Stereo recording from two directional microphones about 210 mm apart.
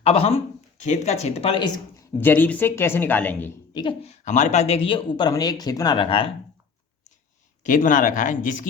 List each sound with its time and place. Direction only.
0.0 s a woman's voice: 30° left (ahead or behind)
2.2 s speech: 10° left (ahead or behind)
3.8 s a woman's voice: 25° left (ahead or behind)
7.6 s speech: 40° left (ahead or behind)